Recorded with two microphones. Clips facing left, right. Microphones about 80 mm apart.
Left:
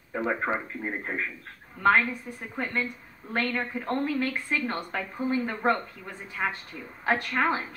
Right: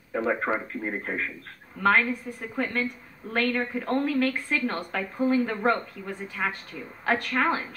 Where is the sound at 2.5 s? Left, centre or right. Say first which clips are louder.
Right 2 dB; left.